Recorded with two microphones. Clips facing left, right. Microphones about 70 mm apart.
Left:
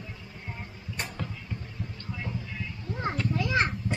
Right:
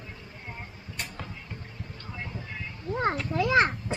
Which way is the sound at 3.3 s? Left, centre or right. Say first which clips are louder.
Right 5 dB; right.